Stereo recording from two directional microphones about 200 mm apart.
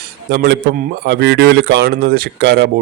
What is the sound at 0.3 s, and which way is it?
Speech, 55° right (ahead or behind).